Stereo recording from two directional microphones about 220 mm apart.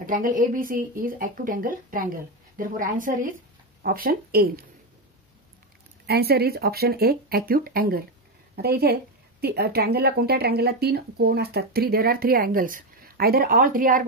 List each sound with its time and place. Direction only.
0.0 s speech: 40° right (ahead or behind)
6.0 s speech: 45° right (ahead or behind)